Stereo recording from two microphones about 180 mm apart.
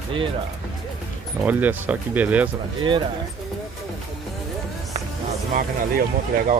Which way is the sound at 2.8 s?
25° right (ahead or behind).